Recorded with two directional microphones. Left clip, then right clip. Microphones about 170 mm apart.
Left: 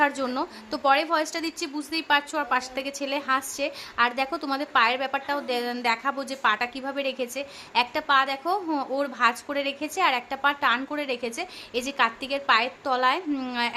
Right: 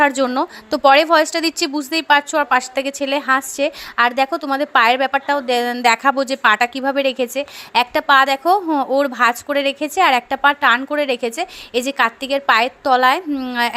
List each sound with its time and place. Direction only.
0.0 s a woman's voice: 35° right (ahead or behind)
13.3 s speech: 25° right (ahead or behind)